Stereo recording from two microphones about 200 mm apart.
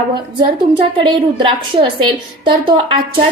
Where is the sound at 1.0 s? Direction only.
25° right (ahead or behind).